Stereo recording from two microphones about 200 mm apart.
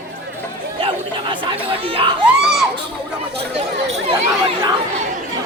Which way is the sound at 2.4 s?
Centre (ahead or behind).